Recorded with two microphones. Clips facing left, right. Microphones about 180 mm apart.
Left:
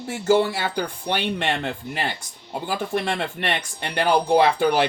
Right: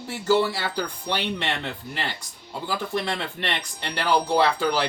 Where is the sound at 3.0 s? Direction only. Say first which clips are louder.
Left 3 dB; 55° left (ahead or behind).